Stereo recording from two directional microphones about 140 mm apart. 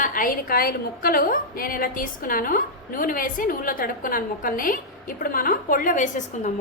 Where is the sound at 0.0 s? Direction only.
85° left.